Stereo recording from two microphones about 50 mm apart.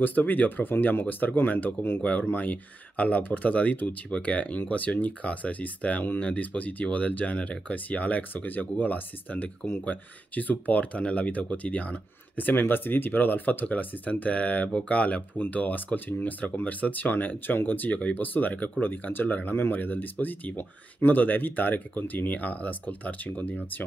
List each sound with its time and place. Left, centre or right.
0.0 s speech: left